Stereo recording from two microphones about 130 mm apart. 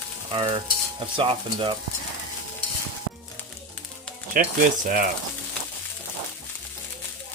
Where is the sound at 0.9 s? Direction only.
40° right (ahead or behind).